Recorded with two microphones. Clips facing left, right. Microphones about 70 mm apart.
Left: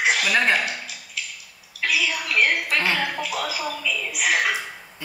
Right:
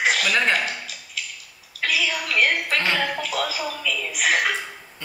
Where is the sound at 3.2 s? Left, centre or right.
Centre.